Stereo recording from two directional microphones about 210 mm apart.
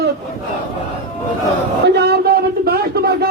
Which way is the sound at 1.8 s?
50° right (ahead or behind).